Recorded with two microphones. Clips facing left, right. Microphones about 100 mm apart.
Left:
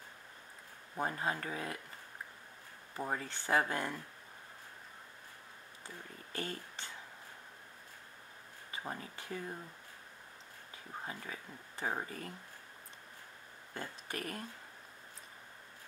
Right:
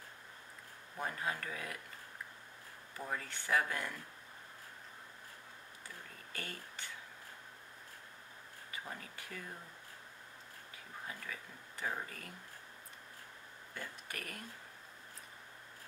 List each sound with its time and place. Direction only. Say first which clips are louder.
0.9 s speech: left 3 dB; 25° left (ahead or behind)
3.0 s speech: left 4 dB; 30° left (ahead or behind)
6.3 s speech: left 6 dB; 25° left (ahead or behind)
8.7 s speech: left 4 dB; 25° left (ahead or behind)
11.1 s speech: right 1 dB; 25° left (ahead or behind)
13.7 s speech: left 4 dB; 25° left (ahead or behind)